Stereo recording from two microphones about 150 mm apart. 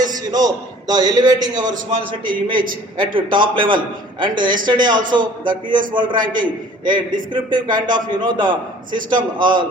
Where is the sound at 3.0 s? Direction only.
30° right (ahead or behind).